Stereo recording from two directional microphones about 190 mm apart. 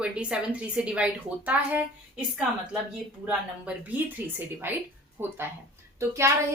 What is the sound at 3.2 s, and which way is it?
A woman's voice, 5° right (ahead or behind).